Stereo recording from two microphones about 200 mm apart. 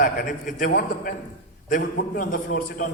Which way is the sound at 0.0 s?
40° left (ahead or behind).